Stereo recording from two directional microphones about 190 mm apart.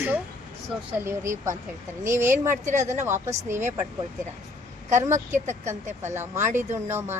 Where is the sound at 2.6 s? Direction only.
40° right (ahead or behind).